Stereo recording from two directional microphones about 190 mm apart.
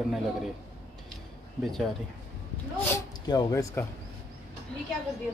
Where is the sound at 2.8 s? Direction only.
15° left (ahead or behind).